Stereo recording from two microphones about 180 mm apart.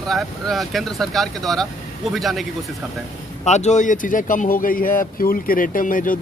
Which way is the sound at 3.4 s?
40° left (ahead or behind).